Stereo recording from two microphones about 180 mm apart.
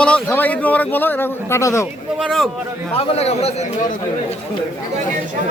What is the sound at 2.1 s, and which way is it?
Speech, centre (ahead or behind).